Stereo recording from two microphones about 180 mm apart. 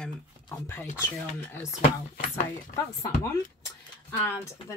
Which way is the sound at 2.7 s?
15° left (ahead or behind).